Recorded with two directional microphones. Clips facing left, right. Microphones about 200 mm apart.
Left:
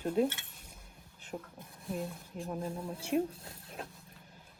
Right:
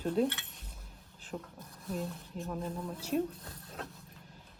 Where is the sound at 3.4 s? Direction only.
30° left (ahead or behind).